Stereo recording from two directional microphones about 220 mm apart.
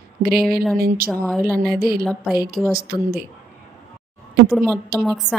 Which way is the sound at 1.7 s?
45° right (ahead or behind).